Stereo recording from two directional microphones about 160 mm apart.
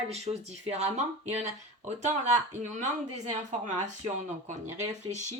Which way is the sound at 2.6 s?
50° right (ahead or behind).